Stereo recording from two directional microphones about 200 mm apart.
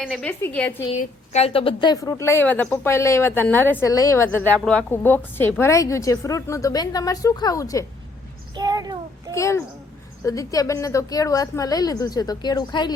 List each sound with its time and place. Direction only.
0.0 s a woman's voice: centre (ahead or behind)
0.9 s a woman's voice: 30° left (ahead or behind); by 7.9 s 15° left (ahead or behind)
8.5 s child singing: 20° right (ahead or behind)
9.3 s a woman's voice: 15° left (ahead or behind)